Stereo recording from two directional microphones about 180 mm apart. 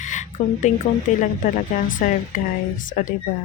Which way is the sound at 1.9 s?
50° left (ahead or behind).